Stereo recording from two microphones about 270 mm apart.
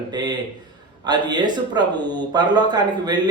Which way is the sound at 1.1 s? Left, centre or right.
Centre.